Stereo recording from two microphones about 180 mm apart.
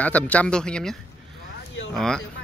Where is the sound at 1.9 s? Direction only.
5° left (ahead or behind).